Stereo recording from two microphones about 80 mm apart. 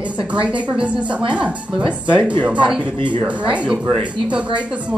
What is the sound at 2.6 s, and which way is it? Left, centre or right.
Speech, centre.